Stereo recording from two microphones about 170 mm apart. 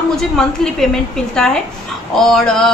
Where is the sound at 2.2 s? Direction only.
Centre (ahead or behind).